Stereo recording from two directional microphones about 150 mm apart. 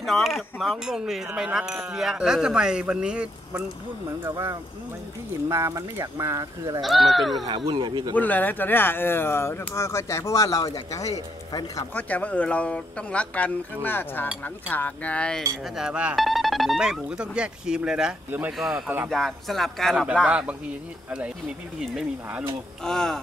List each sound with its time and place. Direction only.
0.0 s speech: centre (ahead or behind)
5.5 s speech: 20° right (ahead or behind)
6.8 s speech: centre (ahead or behind)
7.6 s a man's voice: 30° right (ahead or behind)
8.1 s speech: 10° left (ahead or behind)
11.9 s speech: 10° left (ahead or behind)
15.7 s speech: 5° right (ahead or behind)
21.9 s speech: 10° right (ahead or behind)
22.8 s speech: 5° left (ahead or behind)